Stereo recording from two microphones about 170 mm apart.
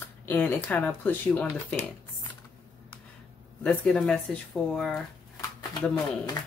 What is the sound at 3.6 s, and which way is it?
Speech, 5° left (ahead or behind).